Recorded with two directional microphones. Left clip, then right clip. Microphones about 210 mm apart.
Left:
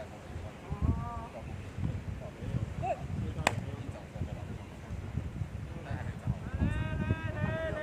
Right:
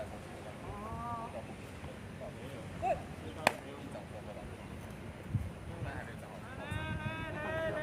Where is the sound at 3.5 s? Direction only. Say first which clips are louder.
Even; 25° left (ahead or behind).